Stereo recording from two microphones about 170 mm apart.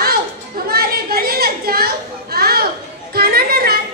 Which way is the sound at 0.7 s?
65° right (ahead or behind).